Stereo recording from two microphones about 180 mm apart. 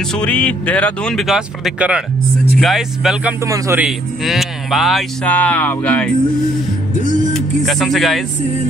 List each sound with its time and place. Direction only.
0.1 s speech: 5° left (ahead or behind)
3.4 s a man's voice: 15° right (ahead or behind)
3.8 s speech: centre (ahead or behind)
7.3 s speech: centre (ahead or behind)